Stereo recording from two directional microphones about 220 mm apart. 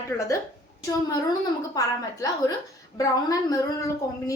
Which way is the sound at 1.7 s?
15° left (ahead or behind).